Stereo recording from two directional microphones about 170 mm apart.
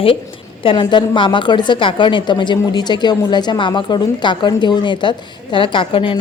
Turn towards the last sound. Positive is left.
turn(degrees=30)  # may be behind; listen again after turning